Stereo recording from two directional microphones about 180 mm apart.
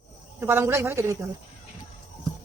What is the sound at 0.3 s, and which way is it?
Speech, 10° right (ahead or behind).